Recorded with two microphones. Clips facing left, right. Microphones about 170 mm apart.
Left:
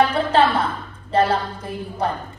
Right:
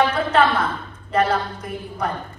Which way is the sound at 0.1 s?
30° left (ahead or behind).